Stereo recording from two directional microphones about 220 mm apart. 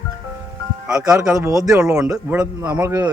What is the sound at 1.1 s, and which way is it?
Speech, 10° right (ahead or behind).